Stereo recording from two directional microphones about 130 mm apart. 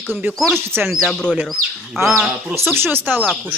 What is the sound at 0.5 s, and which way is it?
Speech, 15° right (ahead or behind).